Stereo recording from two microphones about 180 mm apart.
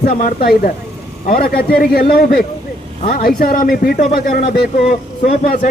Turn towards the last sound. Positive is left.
turn(degrees=50)  # may be behind; listen again after turning